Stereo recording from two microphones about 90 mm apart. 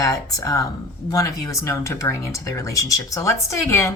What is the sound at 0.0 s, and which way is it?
A woman's voice, 40° left (ahead or behind).